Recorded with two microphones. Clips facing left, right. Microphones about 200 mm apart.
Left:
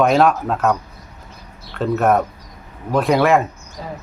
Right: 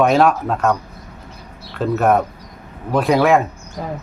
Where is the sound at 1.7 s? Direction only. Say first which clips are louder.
Right 1 dB; centre (ahead or behind).